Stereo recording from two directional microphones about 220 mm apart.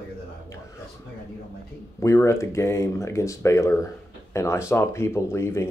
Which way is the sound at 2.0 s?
10° left (ahead or behind).